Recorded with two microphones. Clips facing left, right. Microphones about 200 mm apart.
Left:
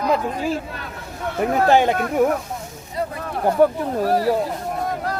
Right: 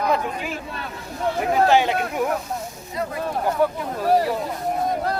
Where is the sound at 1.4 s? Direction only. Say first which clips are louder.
Left 2 dB; 50° left (ahead or behind).